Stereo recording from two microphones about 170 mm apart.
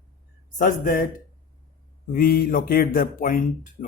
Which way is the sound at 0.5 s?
50° left (ahead or behind).